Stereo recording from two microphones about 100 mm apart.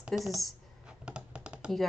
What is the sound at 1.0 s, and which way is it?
Computer keyboard, 10° right (ahead or behind).